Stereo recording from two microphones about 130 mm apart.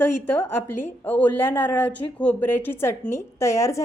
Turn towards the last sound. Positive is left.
turn(degrees=25)  # may be behind; listen again after turning